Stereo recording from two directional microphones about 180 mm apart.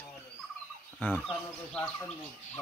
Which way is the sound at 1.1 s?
5° right (ahead or behind).